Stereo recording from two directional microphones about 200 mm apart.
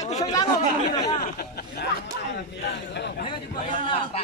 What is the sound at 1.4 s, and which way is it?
Vehicle, 50° left (ahead or behind).